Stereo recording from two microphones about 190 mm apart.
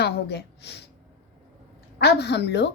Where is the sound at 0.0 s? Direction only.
60° left (ahead or behind).